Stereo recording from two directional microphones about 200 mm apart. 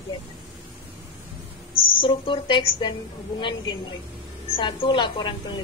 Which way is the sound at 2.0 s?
25° left (ahead or behind).